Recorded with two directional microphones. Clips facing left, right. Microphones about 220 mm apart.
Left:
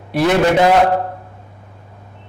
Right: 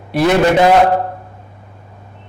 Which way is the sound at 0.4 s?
15° right (ahead or behind).